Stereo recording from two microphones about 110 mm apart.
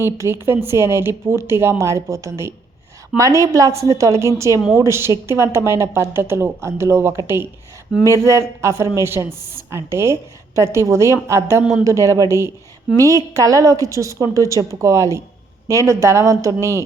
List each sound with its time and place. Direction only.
0.0 s speech: 25° right (ahead or behind)